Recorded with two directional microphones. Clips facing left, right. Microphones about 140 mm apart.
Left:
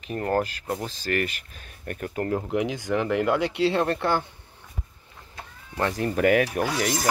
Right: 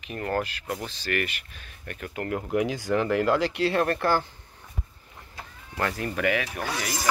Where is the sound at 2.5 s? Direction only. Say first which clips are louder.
Even; 20° left (ahead or behind).